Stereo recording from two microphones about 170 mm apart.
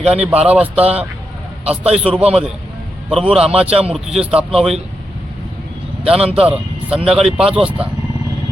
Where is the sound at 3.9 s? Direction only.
Centre (ahead or behind).